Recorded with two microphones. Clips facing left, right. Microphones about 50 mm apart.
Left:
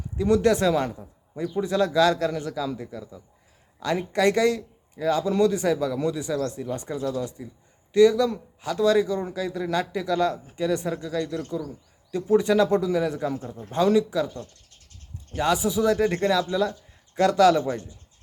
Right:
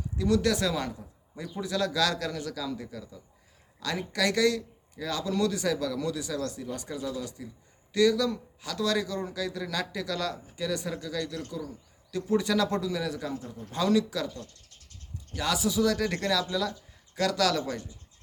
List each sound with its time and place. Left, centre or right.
0.2 s a man's voice: left
15.3 s a man's voice: left